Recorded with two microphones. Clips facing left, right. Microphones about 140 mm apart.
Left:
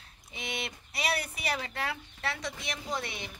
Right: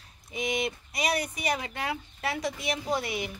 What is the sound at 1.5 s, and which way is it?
Speech, 10° right (ahead or behind).